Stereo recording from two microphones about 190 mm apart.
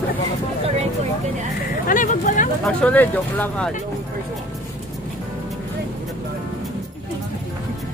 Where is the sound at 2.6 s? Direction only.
5° left (ahead or behind).